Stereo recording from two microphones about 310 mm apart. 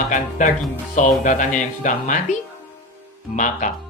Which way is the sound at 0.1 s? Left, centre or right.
Left.